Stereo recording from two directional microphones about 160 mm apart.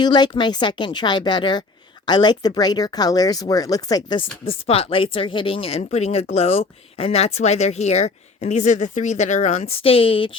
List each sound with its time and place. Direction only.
0.0 s speech: 30° left (ahead or behind)
4.6 s speech: 35° left (ahead or behind)